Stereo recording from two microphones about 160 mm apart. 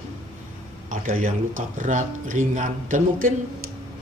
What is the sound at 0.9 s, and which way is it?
Speech, 60° right (ahead or behind).